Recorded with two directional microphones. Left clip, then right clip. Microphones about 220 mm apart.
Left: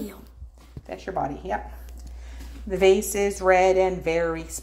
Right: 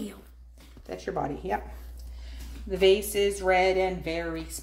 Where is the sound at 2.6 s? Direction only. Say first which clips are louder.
Left 3 dB; 20° left (ahead or behind).